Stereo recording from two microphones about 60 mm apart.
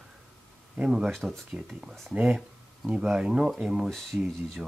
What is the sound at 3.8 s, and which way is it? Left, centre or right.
Speech, centre.